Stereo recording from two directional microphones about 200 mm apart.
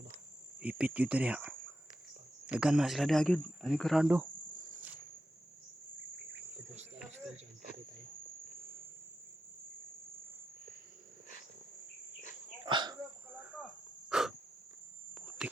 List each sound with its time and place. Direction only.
0.6 s speech: 5° right (ahead or behind)
12.6 s hiccup: 20° right (ahead or behind)
14.1 s insect: centre (ahead or behind)
15.1 s cricket: centre (ahead or behind)